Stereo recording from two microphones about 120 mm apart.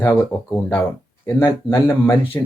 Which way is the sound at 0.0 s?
15° left (ahead or behind).